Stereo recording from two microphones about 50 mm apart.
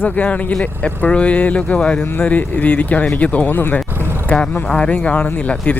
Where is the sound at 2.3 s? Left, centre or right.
Left.